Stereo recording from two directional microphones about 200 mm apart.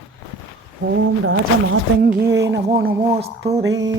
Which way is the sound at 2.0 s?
50° right (ahead or behind).